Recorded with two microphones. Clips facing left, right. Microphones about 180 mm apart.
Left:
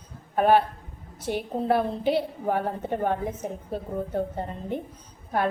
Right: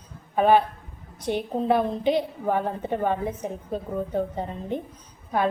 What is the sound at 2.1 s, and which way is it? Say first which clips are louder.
Speech: even; 10° left (ahead or behind).